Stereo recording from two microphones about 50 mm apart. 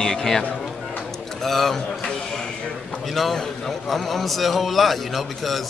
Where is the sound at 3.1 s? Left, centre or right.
Centre.